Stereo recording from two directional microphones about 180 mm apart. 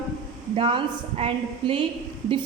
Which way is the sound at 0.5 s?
30° right (ahead or behind).